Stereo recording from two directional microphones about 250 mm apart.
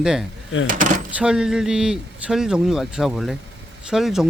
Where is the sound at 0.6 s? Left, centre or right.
Right.